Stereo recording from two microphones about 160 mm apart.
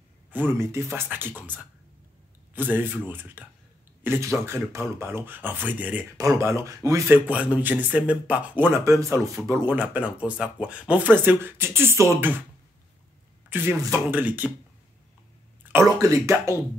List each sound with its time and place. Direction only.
0.3 s speech: 10° right (ahead or behind)
2.5 s speech: 10° right (ahead or behind)
7.2 s speech: 10° right (ahead or behind)
13.5 s speech: 15° right (ahead or behind)
15.7 s speech: 20° right (ahead or behind)